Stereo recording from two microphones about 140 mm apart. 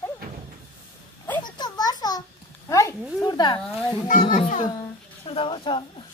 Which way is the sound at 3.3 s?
25° left (ahead or behind).